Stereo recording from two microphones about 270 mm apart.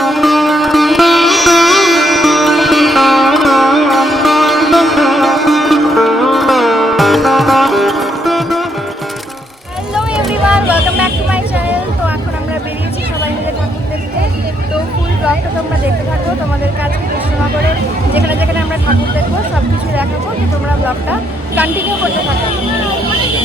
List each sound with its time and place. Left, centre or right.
0.0 s music: centre
9.9 s vehicle: centre
20.8 s speech: centre